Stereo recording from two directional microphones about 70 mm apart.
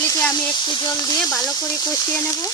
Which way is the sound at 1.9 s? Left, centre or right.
Left.